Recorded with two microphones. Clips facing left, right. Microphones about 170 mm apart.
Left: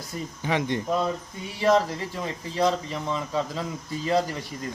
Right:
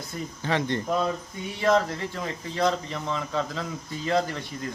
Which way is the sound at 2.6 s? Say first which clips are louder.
Left 1 dB; 5° left (ahead or behind).